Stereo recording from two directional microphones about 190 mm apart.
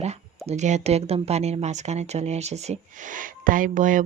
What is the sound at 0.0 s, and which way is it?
Speech, 35° right (ahead or behind).